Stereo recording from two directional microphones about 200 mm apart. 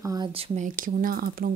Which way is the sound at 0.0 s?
15° right (ahead or behind).